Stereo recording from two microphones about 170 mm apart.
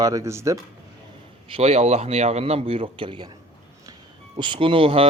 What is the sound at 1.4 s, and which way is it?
Speech, 35° right (ahead or behind).